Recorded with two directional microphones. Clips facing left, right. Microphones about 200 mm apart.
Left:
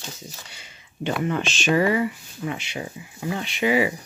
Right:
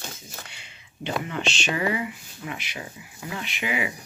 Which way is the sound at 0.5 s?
45° left (ahead or behind).